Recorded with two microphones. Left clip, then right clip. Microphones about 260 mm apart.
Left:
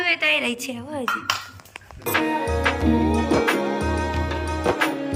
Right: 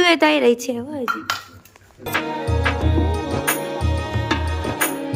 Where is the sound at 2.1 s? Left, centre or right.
Centre.